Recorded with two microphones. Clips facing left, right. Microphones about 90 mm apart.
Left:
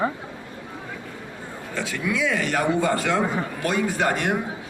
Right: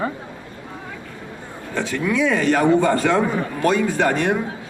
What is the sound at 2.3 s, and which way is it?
Speech, 45° right (ahead or behind).